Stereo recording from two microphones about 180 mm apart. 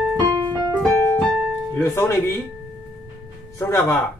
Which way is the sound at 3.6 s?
15° left (ahead or behind).